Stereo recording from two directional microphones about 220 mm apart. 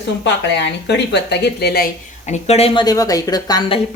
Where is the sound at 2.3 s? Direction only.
30° left (ahead or behind).